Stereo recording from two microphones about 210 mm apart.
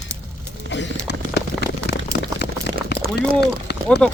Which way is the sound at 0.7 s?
60° left (ahead or behind).